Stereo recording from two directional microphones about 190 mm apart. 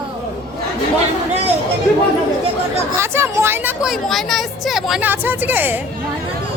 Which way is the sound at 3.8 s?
Centre (ahead or behind).